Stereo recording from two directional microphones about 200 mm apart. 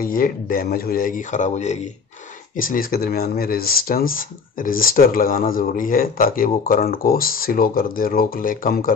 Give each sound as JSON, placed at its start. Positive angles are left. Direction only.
{"t": 0.0, "sound": "speech", "side_deg": 45}